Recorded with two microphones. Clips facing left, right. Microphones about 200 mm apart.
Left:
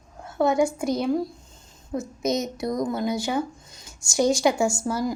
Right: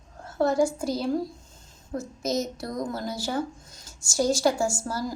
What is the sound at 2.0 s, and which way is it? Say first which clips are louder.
A woman's voice: left 2 dB; 5° right (ahead or behind).